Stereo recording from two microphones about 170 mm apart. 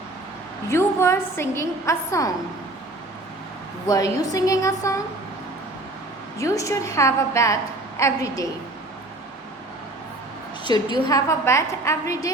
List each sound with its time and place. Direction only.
0.7 s a woman's voice: 15° left (ahead or behind)
3.8 s a woman's voice: 20° left (ahead or behind)
6.4 s a woman's voice: 20° left (ahead or behind)
10.6 s a woman's voice: 25° left (ahead or behind)